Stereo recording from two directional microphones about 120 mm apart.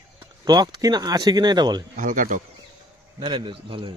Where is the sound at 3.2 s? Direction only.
45° right (ahead or behind).